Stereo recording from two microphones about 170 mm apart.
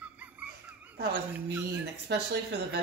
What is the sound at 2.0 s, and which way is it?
Speech, 75° right (ahead or behind).